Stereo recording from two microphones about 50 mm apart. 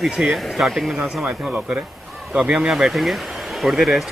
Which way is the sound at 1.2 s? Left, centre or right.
Right.